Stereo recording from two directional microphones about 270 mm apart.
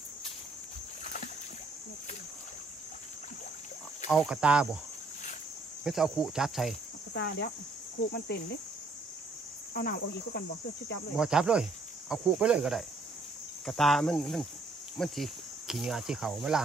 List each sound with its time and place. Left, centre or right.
1.0 s rowboat: left
4.1 s cricket: centre
5.9 s cricket: centre
7.2 s cricket: left
9.8 s cricket: left
11.1 s cricket: centre